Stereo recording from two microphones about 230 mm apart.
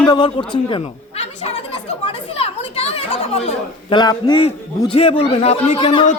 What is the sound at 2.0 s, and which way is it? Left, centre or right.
Chatter, left.